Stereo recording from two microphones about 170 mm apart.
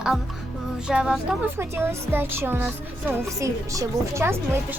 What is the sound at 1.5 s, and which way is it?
Speech, 15° right (ahead or behind).